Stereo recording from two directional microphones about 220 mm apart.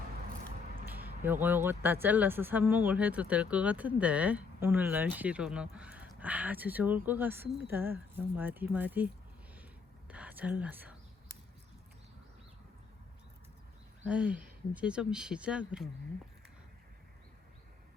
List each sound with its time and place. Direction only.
1.0 s speech: 10° right (ahead or behind)
10.1 s speech: 5° right (ahead or behind)
14.0 s speech: 5° right (ahead or behind)